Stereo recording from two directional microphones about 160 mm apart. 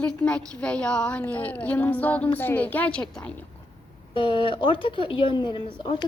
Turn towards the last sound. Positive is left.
turn(degrees=30)  # may be behind; listen again after turning